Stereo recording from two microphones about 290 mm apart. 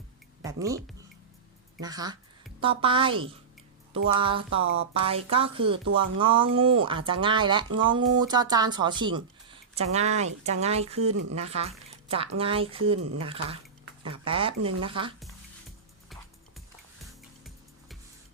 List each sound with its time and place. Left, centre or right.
0.4 s speech: centre
1.8 s a woman's voice: centre
11.1 s speech: right
11.3 s a woman's voice: right